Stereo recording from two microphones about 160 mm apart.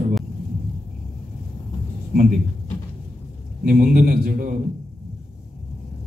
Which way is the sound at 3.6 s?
75° right (ahead or behind).